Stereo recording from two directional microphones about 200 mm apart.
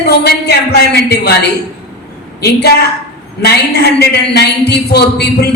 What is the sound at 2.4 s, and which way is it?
A man's voice, 55° left (ahead or behind).